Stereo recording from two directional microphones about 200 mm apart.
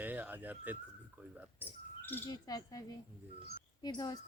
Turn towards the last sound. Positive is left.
turn(degrees=20)  # may be behind; listen again after turning